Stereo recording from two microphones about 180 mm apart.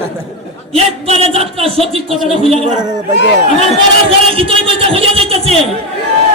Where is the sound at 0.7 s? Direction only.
35° right (ahead or behind).